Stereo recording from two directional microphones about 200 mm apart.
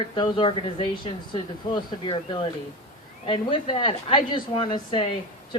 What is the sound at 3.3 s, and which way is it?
Speech, 25° left (ahead or behind).